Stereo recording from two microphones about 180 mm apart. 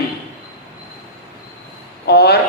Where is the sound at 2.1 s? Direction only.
65° left (ahead or behind).